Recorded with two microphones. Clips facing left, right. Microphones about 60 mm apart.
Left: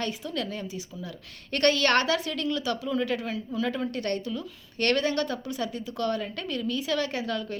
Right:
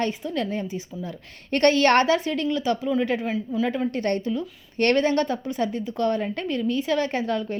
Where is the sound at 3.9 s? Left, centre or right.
Right.